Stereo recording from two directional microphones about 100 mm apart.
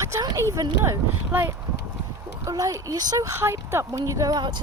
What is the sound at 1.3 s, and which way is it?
Speech, 20° right (ahead or behind).